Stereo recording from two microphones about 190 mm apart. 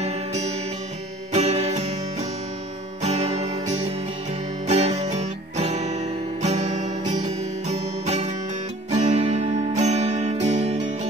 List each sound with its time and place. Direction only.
0.0 s music: 35° right (ahead or behind)
3.0 s music: 35° right (ahead or behind)